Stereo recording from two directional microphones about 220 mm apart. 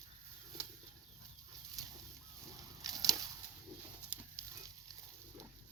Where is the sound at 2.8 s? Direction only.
15° right (ahead or behind).